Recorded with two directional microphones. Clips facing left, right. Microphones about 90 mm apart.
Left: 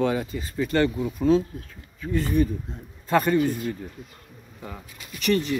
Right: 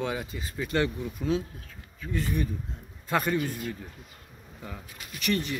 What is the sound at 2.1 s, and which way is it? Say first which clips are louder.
Speech: left 7 dB; 5° right (ahead or behind).